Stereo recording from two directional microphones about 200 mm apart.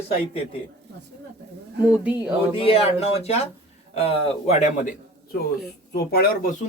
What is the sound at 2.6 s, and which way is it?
A man's voice, 30° left (ahead or behind).